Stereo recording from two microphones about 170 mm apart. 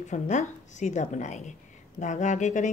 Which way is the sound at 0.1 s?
45° left (ahead or behind).